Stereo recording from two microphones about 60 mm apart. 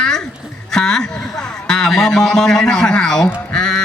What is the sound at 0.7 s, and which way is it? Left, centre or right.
A man's voice, centre.